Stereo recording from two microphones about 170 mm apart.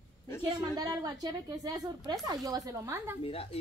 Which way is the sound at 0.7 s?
20° right (ahead or behind).